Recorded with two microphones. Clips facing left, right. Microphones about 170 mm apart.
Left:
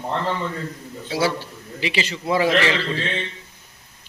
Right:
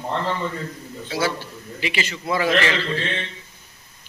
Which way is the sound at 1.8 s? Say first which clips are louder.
Left 2 dB; 30° left (ahead or behind).